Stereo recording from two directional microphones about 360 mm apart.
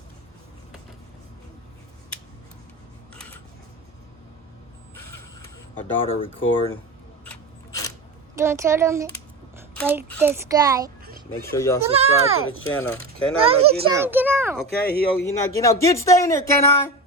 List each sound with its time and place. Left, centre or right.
6.1 s speech: centre
7.3 s a sound: centre
8.4 s a child's voice: centre
11.0 s a sound: right
11.5 s speech: centre
11.8 s a child's voice: centre
12.5 s speech: left
13.4 s a child's voice: centre
13.9 s a child's voice: centre
14.8 s speech: left
15.3 s speech: centre